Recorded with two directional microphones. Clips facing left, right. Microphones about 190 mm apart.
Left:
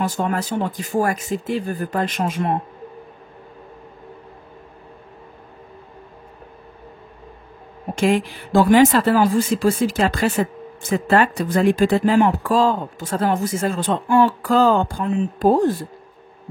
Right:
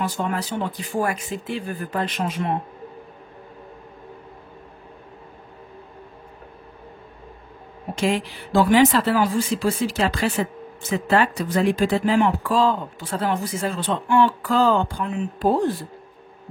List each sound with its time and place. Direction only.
0.0 s speech: 45° left (ahead or behind)
7.9 s speech: 50° left (ahead or behind)